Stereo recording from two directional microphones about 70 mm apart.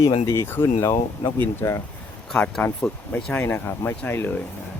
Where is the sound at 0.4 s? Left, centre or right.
Left.